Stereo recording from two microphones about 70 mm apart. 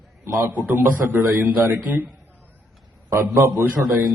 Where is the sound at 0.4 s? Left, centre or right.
Right.